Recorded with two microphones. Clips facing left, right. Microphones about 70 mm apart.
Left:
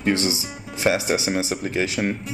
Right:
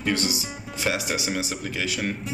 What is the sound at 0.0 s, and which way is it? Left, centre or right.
Speech, left.